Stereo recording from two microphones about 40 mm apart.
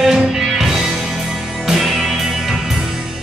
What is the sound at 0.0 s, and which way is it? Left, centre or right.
Music, centre.